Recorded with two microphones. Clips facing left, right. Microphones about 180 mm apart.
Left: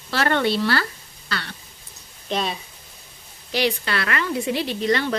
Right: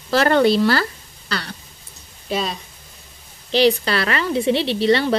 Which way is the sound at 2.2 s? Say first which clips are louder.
Right 2 dB; centre (ahead or behind).